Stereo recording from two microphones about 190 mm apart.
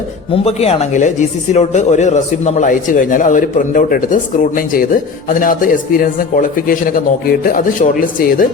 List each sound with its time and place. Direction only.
0.3 s a man's voice: 30° left (ahead or behind)